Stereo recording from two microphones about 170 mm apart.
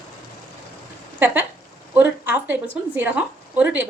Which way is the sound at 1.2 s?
10° right (ahead or behind).